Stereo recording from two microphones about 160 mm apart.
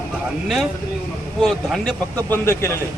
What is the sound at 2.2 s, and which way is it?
Speech, 15° left (ahead or behind).